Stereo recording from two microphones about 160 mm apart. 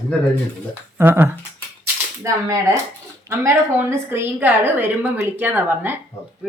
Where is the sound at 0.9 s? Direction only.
15° right (ahead or behind).